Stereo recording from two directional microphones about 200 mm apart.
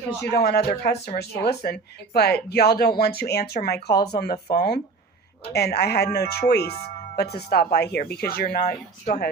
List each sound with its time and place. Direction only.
0.3 s speech: 50° left (ahead or behind)